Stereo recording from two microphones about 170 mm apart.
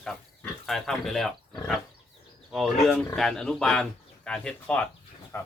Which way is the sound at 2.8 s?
Centre (ahead or behind).